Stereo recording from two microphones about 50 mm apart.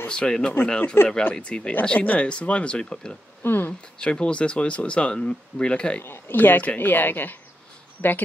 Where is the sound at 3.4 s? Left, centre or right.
Left.